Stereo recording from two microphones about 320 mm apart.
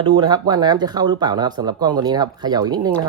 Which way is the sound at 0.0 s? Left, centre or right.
Centre.